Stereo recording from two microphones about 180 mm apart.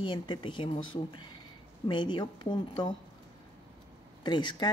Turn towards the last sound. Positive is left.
turn(degrees=25)  # may be behind; listen again after turning